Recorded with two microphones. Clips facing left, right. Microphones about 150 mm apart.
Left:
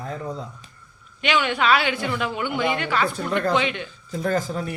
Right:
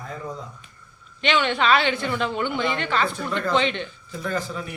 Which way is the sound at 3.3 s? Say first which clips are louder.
Left 3 dB; 55° left (ahead or behind).